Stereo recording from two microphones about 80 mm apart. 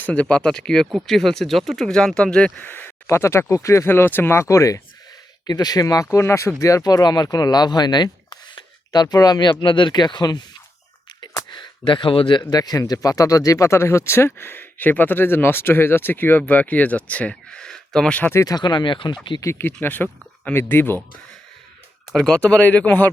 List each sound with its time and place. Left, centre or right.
0.0 s speech: centre
2.6 s speech: left
5.5 s speech: left
9.5 s speech: left
11.5 s speech: left; by 18.2 s centre
18.4 s speech: left
19.5 s speech: left
22.1 s speech: centre
22.4 s speech: centre